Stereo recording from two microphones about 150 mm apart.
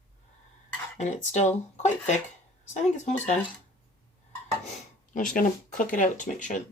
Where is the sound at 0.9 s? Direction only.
55° left (ahead or behind).